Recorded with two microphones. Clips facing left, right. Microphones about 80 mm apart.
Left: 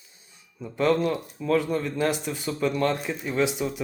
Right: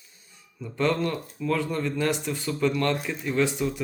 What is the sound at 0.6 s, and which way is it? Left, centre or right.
Speech, centre.